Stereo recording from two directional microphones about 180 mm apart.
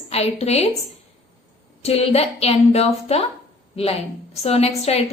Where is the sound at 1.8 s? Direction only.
35° left (ahead or behind).